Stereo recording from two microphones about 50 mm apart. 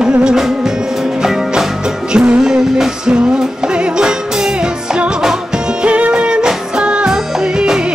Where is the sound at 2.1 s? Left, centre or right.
Right.